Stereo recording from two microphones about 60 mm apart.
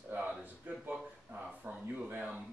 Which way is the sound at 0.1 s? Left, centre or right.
Right.